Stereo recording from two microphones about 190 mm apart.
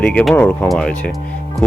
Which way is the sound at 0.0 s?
5° left (ahead or behind).